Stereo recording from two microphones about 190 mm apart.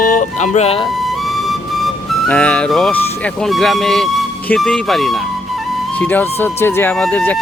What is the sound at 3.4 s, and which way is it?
Speech, centre (ahead or behind).